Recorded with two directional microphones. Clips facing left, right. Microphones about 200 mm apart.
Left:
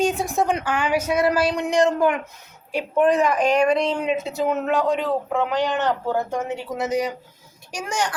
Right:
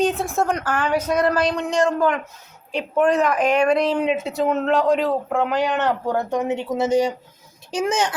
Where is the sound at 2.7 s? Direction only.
5° left (ahead or behind).